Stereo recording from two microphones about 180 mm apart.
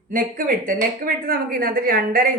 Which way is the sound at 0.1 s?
50° right (ahead or behind).